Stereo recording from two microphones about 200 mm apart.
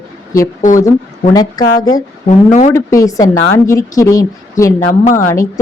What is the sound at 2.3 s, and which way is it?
Speech, 35° left (ahead or behind).